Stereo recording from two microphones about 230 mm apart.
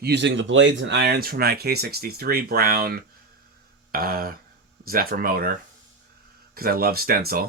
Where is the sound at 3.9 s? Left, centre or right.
Right.